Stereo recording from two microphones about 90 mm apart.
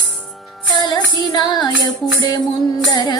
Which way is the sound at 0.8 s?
50° left (ahead or behind).